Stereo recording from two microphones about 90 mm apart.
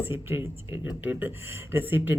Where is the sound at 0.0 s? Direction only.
25° right (ahead or behind).